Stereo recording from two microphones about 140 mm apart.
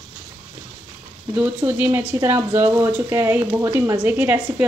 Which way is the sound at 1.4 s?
10° right (ahead or behind).